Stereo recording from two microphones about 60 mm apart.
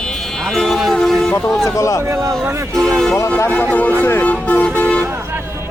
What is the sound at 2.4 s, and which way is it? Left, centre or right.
Speech, right.